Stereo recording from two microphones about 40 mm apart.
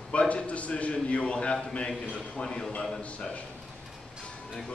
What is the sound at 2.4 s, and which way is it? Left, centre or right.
Speech, centre.